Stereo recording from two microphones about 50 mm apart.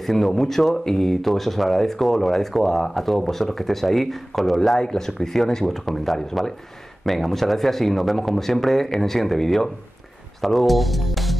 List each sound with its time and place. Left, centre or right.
0.0 s speech: centre